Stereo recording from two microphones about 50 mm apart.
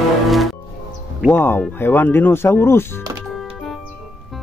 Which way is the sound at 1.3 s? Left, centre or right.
Left.